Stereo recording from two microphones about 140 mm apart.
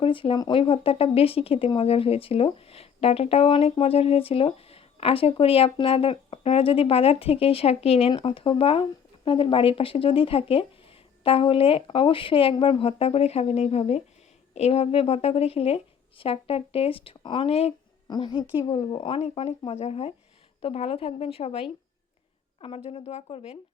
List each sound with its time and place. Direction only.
0.0 s a woman's voice: 40° left (ahead or behind)
18.1 s a woman's voice: 30° left (ahead or behind)